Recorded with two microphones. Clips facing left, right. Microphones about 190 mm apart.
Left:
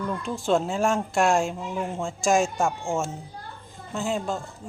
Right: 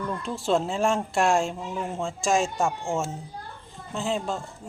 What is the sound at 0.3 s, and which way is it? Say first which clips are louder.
Speech: left 1 dB; centre (ahead or behind).